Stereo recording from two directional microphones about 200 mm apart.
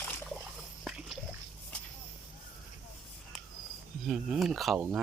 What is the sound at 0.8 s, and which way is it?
Pig, 5° right (ahead or behind).